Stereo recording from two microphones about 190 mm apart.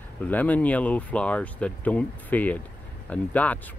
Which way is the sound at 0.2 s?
10° left (ahead or behind).